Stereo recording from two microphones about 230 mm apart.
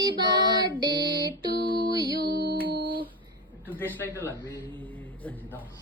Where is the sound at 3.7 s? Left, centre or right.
Centre.